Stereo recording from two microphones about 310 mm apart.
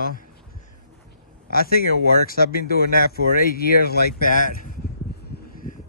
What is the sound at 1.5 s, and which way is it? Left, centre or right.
Speech, left.